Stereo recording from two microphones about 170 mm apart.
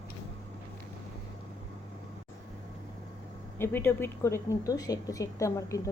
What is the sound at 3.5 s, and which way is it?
A woman's voice, 15° left (ahead or behind).